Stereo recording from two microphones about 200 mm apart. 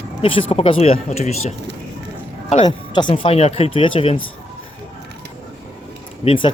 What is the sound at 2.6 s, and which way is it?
Speech, 20° left (ahead or behind).